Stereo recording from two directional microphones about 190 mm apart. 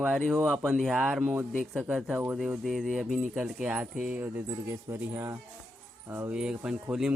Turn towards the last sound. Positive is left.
turn(degrees=-5)  # may be behind; listen again after turning